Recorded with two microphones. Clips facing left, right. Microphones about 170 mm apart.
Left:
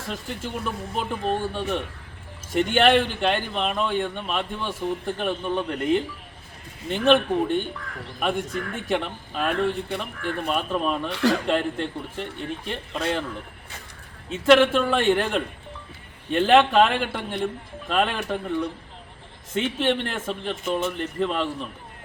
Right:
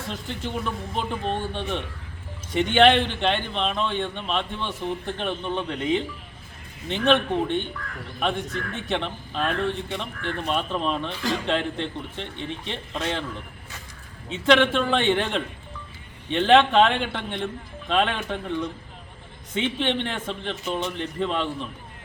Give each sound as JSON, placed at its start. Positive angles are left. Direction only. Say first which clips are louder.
{"t": 0.1, "sound": "a man's voice", "louder": "left 1 dB", "side_deg": 5}
{"t": 11.1, "sound": "speech", "louder": "left 6 dB", "side_deg": 75}
{"t": 11.4, "sound": "a man's voice", "louder": "left 2 dB", "side_deg": 5}
{"t": 14.3, "sound": "a man's voice", "louder": "left 3 dB", "side_deg": 5}
{"t": 19.6, "sound": "a man's voice", "louder": "left 1 dB", "side_deg": 5}